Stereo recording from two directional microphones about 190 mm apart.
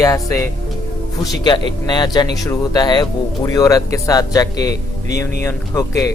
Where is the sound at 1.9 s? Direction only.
20° left (ahead or behind).